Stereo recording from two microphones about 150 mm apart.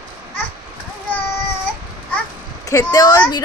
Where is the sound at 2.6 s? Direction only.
25° left (ahead or behind).